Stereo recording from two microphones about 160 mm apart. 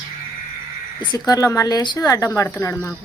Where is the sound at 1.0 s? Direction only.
25° left (ahead or behind).